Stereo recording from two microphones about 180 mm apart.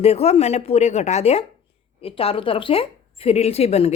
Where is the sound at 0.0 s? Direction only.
35° left (ahead or behind).